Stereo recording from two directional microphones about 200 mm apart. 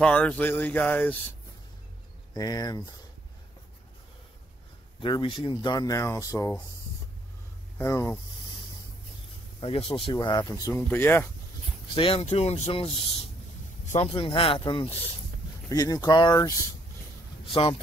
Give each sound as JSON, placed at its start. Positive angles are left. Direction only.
{"t": 0.0, "sound": "a sound", "side_deg": 5}
{"t": 2.3, "sound": "speech", "side_deg": 20}
{"t": 5.0, "sound": "speech", "side_deg": 25}
{"t": 7.7, "sound": "speech", "side_deg": 15}
{"t": 9.6, "sound": "speech", "side_deg": 30}
{"t": 11.9, "sound": "speech", "side_deg": 25}
{"t": 13.9, "sound": "speech", "side_deg": 30}